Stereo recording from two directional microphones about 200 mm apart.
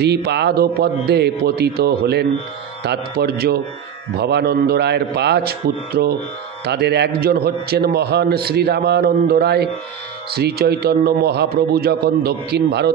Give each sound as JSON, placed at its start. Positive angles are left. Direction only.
{"t": 0.0, "sound": "a man's voice", "side_deg": -55}